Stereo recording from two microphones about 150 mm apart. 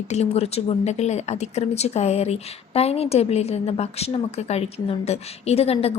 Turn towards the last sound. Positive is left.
turn(degrees=40)  # may be behind; listen again after turning